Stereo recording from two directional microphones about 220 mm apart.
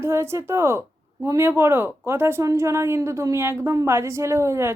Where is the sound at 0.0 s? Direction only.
10° right (ahead or behind).